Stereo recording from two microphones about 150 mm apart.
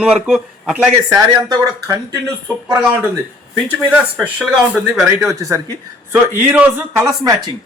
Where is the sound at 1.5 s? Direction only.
20° right (ahead or behind).